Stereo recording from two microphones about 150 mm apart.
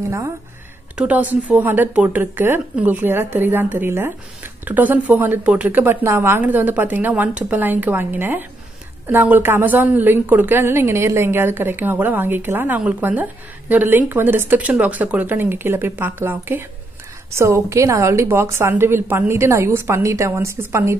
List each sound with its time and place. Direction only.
0.9 s a woman's voice: 10° right (ahead or behind)